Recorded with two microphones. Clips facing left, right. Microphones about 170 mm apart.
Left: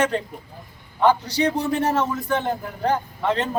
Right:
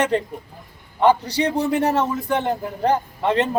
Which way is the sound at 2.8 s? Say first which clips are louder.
Right 2 dB; 20° right (ahead or behind).